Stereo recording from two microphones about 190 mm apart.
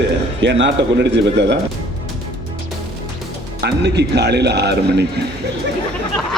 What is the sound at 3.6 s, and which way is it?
A man's voice, 60° right (ahead or behind).